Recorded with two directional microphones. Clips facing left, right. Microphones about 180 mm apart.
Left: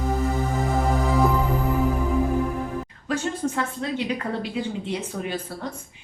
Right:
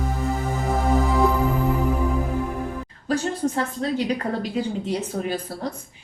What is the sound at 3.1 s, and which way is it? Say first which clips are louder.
A woman's voice: right 3 dB; 35° right (ahead or behind).